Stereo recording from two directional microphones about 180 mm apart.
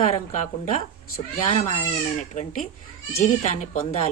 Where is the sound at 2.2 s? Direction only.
40° left (ahead or behind).